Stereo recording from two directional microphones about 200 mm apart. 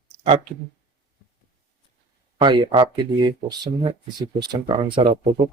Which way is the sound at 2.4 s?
25° right (ahead or behind).